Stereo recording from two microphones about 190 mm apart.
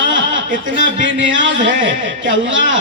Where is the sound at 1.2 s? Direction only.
75° right (ahead or behind).